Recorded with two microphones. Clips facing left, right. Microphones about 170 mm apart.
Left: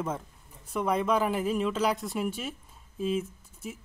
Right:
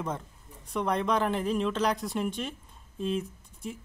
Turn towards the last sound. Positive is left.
turn(degrees=5)  # may be behind; listen again after turning